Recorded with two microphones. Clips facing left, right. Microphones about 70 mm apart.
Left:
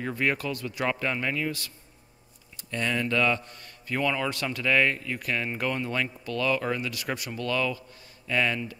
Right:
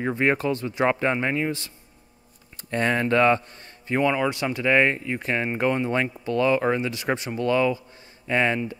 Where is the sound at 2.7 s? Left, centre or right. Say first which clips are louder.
Right 6 dB; right.